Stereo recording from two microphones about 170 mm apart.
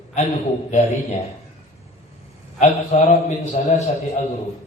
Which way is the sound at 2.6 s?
40° left (ahead or behind).